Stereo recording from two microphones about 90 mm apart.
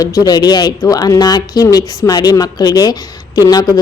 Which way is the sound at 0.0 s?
40° left (ahead or behind).